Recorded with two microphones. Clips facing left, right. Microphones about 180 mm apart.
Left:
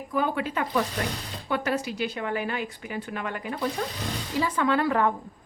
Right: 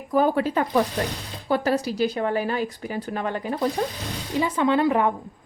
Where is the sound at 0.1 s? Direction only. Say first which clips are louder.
Right 7 dB; 40° right (ahead or behind).